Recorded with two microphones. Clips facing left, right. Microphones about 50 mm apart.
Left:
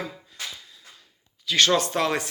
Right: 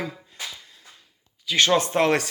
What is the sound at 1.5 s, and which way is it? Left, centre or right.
Speech, centre.